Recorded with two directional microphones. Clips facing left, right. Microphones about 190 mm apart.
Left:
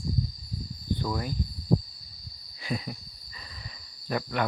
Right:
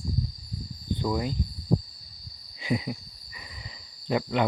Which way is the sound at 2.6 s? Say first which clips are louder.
Right 5 dB; 15° right (ahead or behind).